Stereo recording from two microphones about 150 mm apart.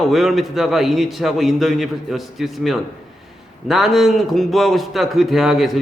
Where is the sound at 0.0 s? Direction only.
Centre (ahead or behind).